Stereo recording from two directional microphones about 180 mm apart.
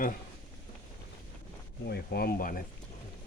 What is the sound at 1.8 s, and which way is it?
Speech, 65° left (ahead or behind).